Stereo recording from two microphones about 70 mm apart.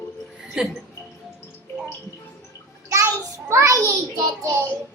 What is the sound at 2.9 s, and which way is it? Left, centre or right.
Child singing, right.